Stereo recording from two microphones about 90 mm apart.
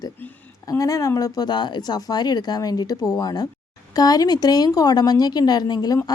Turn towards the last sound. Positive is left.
turn(degrees=50)  # may be behind; listen again after turning